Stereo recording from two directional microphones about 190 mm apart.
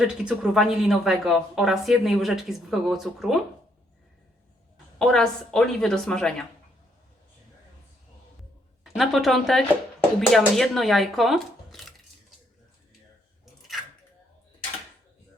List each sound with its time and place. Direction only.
0.0 s speech: 5° right (ahead or behind)
4.9 s speech: 5° left (ahead or behind)
8.8 s speech: centre (ahead or behind)
13.4 s a sound: centre (ahead or behind)